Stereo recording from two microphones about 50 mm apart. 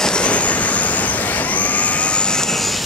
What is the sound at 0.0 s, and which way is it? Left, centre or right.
Vehicle, centre.